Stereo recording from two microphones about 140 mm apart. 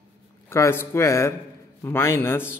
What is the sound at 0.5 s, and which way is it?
A man's voice, 20° left (ahead or behind).